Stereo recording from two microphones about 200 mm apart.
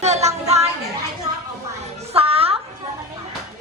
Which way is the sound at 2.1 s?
30° right (ahead or behind).